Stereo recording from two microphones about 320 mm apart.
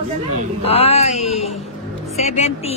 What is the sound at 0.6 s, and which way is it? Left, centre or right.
Speech, centre.